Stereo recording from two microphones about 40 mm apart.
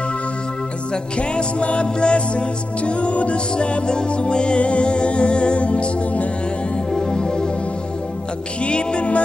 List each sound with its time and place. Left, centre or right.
1.1 s music: left
6.9 s music: centre
8.6 s music: left